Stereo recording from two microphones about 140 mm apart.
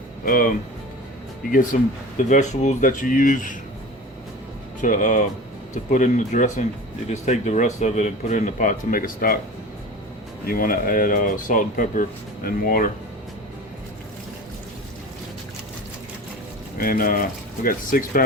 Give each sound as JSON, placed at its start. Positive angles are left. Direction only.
{"t": 0.3, "sound": "speech", "side_deg": 90}
{"t": 1.7, "sound": "speech", "side_deg": 65}
{"t": 4.8, "sound": "speech", "side_deg": 65}
{"t": 10.4, "sound": "speech", "side_deg": 90}
{"t": 16.7, "sound": "speech", "side_deg": 90}